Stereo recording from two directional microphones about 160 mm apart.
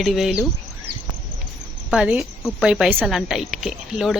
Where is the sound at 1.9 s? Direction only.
5° right (ahead or behind).